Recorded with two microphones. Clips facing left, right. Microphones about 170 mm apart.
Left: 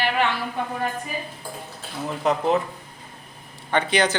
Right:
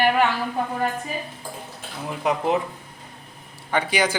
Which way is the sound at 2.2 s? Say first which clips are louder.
Left 1 dB; 15° right (ahead or behind).